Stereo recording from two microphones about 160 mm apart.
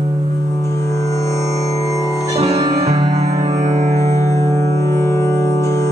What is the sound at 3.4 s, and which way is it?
Music, 45° right (ahead or behind).